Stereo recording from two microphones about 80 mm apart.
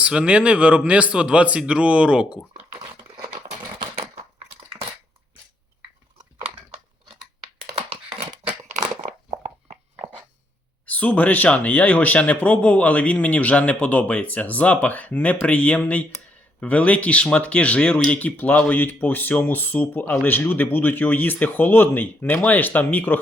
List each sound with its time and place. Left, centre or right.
0.0 s a man's voice: centre
10.8 s speech: centre